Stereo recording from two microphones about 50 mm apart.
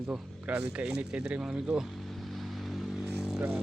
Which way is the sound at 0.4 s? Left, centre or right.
Right.